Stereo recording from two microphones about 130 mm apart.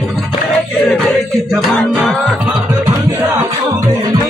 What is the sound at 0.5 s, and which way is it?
Music, 5° left (ahead or behind).